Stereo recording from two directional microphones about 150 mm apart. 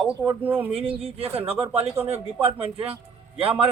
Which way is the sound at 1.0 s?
40° right (ahead or behind).